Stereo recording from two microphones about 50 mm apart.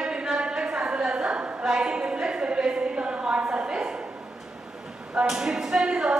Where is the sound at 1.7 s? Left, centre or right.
Centre.